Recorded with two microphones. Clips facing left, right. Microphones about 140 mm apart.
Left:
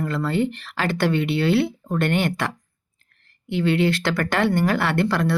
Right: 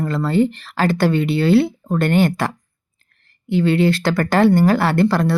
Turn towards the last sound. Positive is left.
turn(degrees=-35)  # may be behind; listen again after turning